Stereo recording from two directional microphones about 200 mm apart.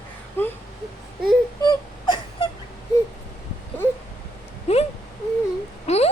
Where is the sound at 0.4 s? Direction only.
10° left (ahead or behind).